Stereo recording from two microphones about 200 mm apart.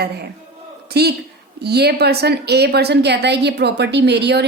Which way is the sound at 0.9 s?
55° right (ahead or behind).